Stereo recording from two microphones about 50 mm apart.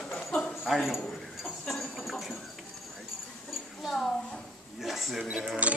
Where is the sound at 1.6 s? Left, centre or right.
Centre.